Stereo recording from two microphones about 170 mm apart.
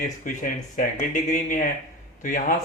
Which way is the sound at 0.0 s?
50° left (ahead or behind).